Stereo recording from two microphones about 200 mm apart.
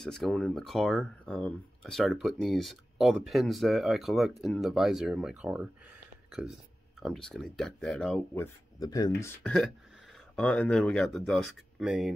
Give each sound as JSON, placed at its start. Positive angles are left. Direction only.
{"t": 0.0, "sound": "speech", "side_deg": 0}
{"t": 7.0, "sound": "speech", "side_deg": 0}
{"t": 8.7, "sound": "speech", "side_deg": 15}
{"t": 9.2, "sound": "speech", "side_deg": 5}